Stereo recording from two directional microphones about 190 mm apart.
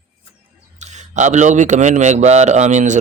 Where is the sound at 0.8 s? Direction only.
40° right (ahead or behind).